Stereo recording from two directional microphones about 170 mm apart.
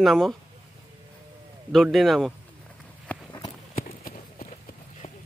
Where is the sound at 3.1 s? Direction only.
10° left (ahead or behind).